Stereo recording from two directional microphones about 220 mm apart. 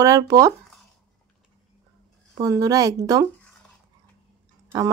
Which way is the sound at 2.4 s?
15° right (ahead or behind).